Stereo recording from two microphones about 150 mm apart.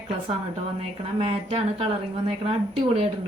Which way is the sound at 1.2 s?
40° right (ahead or behind).